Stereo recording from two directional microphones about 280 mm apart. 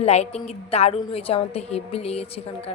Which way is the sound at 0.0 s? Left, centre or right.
Left.